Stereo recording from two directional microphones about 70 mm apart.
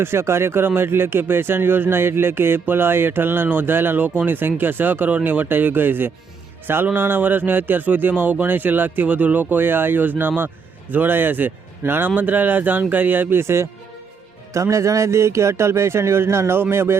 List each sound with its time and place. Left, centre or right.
0.0 s speech: right